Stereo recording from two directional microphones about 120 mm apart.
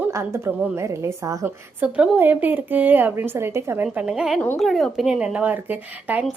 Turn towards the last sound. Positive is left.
turn(degrees=-10)  # may be behind; listen again after turning